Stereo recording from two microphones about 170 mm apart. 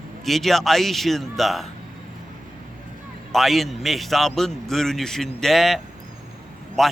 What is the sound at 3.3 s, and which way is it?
A man's voice, centre (ahead or behind).